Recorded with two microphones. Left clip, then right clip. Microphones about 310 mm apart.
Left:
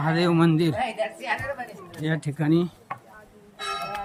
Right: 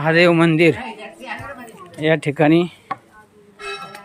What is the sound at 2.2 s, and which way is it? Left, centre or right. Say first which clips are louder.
Speech: right 9 dB; centre.